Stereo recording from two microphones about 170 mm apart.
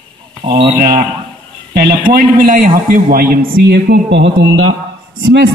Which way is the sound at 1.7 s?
60° right (ahead or behind).